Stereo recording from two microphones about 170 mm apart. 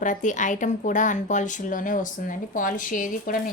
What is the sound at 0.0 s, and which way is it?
Speech, 50° left (ahead or behind).